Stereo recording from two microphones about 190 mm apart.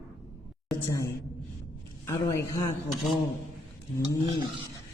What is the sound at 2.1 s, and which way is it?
Speech, 15° left (ahead or behind).